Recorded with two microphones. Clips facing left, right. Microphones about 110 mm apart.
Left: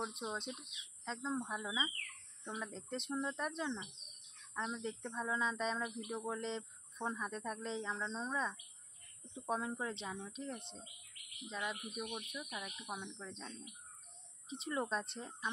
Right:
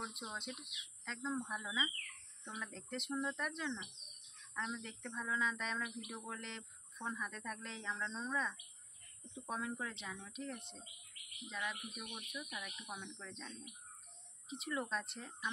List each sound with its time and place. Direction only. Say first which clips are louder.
0.0 s speech: left 4 dB; 20° left (ahead or behind)
14.5 s speech: left 2 dB; 30° left (ahead or behind)